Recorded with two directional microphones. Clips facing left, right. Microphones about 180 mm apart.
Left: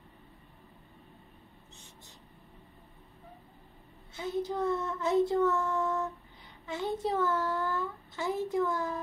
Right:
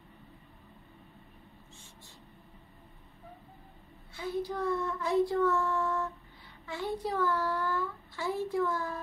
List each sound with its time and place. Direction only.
4.1 s a child's voice: 20° left (ahead or behind)